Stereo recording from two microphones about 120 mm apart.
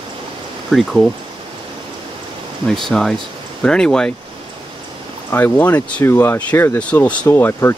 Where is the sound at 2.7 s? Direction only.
5° left (ahead or behind).